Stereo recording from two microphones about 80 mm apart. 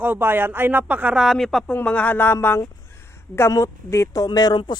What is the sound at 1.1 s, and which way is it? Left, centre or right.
Speech, centre.